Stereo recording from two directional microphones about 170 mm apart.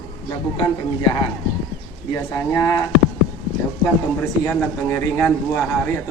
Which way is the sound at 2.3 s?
20° left (ahead or behind).